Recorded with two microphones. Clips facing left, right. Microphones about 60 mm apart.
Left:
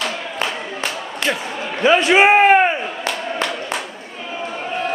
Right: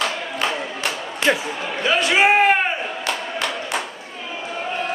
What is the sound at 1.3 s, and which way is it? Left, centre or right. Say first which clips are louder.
Speech: right 3 dB; centre.